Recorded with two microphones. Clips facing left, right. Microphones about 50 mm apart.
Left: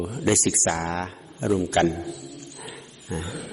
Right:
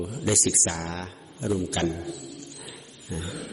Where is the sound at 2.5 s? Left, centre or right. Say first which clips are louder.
Left 3 dB; left.